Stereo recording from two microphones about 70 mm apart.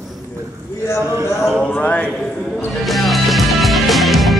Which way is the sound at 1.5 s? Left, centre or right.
Centre.